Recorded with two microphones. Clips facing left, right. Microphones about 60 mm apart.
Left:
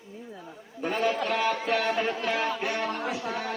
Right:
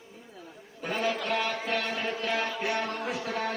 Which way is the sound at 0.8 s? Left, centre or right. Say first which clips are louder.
Left 3 dB; centre.